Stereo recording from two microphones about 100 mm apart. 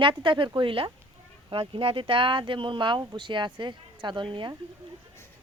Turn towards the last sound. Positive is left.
turn(degrees=-55)  # may be behind; listen again after turning